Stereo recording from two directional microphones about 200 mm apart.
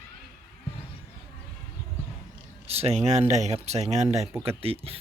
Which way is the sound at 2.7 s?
30° right (ahead or behind).